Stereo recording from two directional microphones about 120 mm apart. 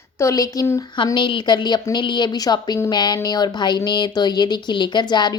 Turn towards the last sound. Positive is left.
turn(degrees=40)  # may be behind; listen again after turning